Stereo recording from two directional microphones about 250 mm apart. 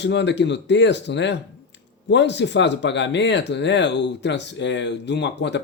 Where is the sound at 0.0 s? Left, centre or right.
Left.